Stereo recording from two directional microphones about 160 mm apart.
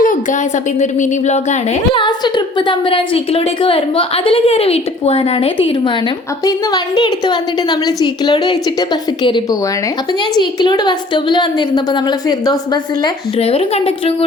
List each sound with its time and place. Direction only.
0.0 s a sound: 55° left (ahead or behind)
0.8 s speech: 50° left (ahead or behind)
1.9 s a woman's voice: 30° left (ahead or behind)
13.4 s a woman's voice: 40° left (ahead or behind)